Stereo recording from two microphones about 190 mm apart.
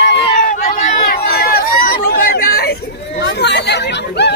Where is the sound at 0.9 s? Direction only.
50° left (ahead or behind).